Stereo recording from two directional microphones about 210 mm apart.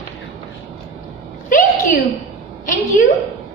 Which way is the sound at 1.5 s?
35° left (ahead or behind).